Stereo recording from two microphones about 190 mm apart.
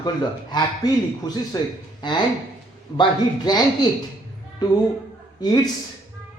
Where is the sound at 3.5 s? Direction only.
20° left (ahead or behind).